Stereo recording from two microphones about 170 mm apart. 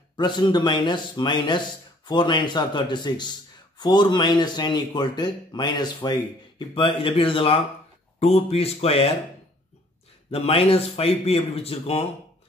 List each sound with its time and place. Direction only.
0.2 s a man's voice: 25° left (ahead or behind)
10.3 s speech: 35° left (ahead or behind)